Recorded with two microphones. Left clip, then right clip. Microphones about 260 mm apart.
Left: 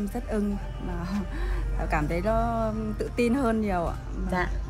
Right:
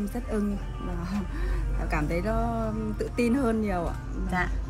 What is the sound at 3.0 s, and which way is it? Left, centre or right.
Speech, centre.